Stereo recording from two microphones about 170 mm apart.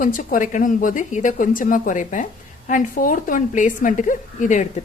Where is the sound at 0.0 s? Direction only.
50° left (ahead or behind).